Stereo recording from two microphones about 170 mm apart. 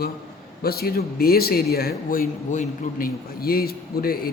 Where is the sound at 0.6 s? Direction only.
65° left (ahead or behind).